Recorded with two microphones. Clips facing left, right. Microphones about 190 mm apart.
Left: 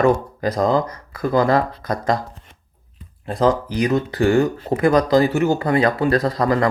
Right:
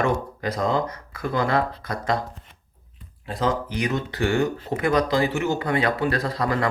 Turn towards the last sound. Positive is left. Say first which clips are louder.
# left 6 dB
turn(degrees=35)  # may be behind; listen again after turning